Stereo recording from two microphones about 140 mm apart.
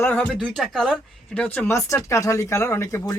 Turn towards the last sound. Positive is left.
turn(degrees=20)  # may be behind; listen again after turning